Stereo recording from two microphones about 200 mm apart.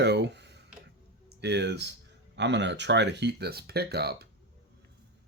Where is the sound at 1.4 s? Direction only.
60° right (ahead or behind).